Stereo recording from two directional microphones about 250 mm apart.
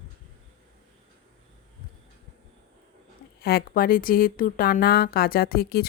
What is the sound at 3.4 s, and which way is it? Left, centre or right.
Speech, left.